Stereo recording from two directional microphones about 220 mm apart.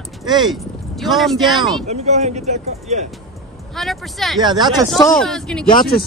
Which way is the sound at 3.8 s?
Centre (ahead or behind).